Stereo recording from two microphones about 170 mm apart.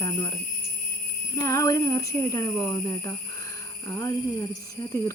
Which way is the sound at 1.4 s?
20° left (ahead or behind).